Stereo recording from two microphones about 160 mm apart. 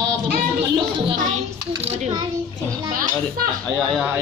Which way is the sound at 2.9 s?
60° right (ahead or behind).